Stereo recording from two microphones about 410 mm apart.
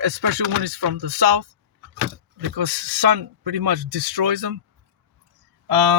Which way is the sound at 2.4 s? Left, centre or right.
Right.